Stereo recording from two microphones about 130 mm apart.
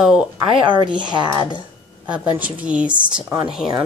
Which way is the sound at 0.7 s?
35° right (ahead or behind).